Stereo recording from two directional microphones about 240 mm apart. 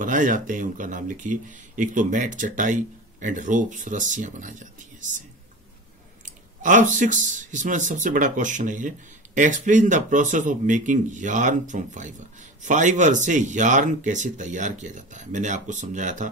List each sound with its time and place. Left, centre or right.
0.0 s speech: right
6.2 s speech: right